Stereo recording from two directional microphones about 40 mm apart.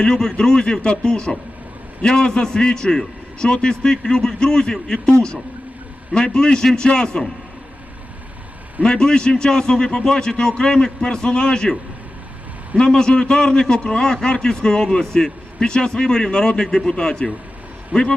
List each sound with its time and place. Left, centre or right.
0.0 s a man's voice: centre
8.8 s a man's voice: centre